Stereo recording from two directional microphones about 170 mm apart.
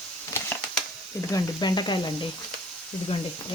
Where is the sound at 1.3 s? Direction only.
25° left (ahead or behind).